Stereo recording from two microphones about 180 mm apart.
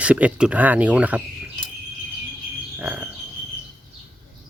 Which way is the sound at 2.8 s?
10° right (ahead or behind).